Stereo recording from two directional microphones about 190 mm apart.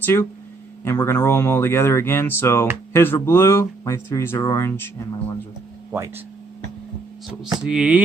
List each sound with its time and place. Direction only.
0.0 s speech: 10° left (ahead or behind)
5.9 s speech: 10° right (ahead or behind)
7.6 s speech: 5° right (ahead or behind)